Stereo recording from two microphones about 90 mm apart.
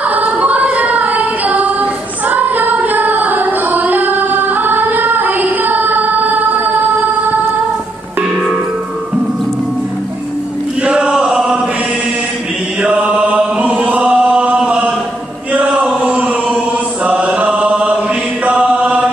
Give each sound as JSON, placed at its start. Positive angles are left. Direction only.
{"t": 0.0, "sound": "child singing", "side_deg": -20}
{"t": 10.8, "sound": "chant", "side_deg": -10}
{"t": 12.8, "sound": "chant", "side_deg": -15}